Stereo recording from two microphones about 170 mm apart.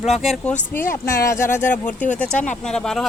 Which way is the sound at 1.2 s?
15° left (ahead or behind).